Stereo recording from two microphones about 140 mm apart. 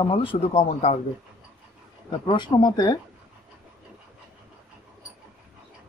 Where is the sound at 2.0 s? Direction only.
35° left (ahead or behind).